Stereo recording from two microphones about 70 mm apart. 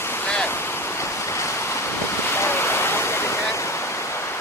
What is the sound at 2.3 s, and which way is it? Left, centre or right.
Waterfall, left.